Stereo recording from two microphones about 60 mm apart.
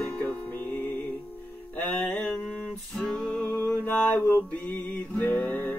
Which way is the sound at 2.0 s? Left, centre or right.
Centre.